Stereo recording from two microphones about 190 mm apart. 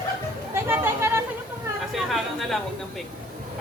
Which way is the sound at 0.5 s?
10° right (ahead or behind).